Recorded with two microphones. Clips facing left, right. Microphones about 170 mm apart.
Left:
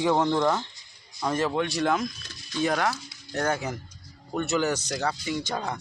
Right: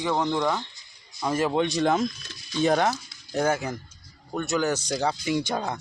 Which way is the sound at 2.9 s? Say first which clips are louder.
Right 3 dB; 10° right (ahead or behind).